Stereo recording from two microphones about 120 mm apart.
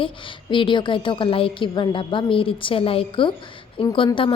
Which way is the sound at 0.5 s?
40° left (ahead or behind).